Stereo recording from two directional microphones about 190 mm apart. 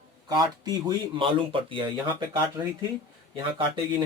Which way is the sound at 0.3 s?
20° right (ahead or behind).